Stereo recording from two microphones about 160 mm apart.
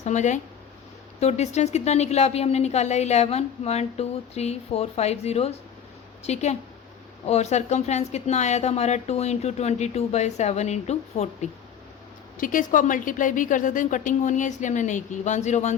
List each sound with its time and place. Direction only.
0.0 s a woman's voice: 45° left (ahead or behind)
12.4 s a woman's voice: 55° left (ahead or behind)